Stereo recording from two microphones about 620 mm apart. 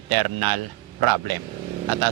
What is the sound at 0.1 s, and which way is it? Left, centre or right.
Speech, right.